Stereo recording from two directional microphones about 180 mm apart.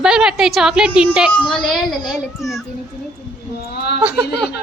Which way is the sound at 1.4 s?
25° left (ahead or behind).